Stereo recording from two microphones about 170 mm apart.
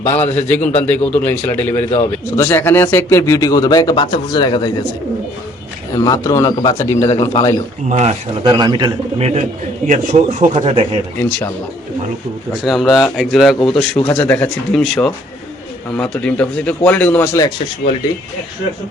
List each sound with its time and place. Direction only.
0.0 s speech: 15° left (ahead or behind)
0.6 s a man's voice: 40° left (ahead or behind)
0.9 s speech: 10° left (ahead or behind); by 4.7 s 25° left (ahead or behind)
5.9 s speech: 20° left (ahead or behind)
7.9 s a man's voice: 40° right (ahead or behind)
8.4 s speech: 25° right (ahead or behind)
9.2 s a man's voice: 40° right (ahead or behind)
12.6 s speech: centre (ahead or behind)
13.6 s speech: 30° left (ahead or behind)
14.1 s speech: 10° left (ahead or behind)